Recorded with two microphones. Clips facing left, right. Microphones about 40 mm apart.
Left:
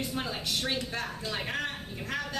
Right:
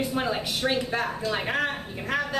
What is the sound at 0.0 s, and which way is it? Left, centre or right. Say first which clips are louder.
A man's voice: right 7 dB; centre.